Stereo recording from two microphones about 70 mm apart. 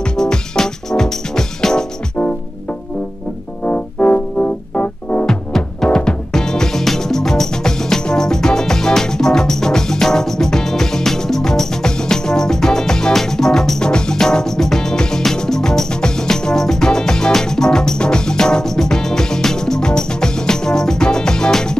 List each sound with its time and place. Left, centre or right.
0.2 s music: centre
3.6 s music: centre